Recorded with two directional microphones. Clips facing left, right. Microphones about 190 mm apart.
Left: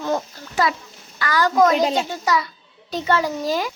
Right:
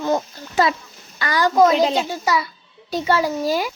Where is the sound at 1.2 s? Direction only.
20° right (ahead or behind).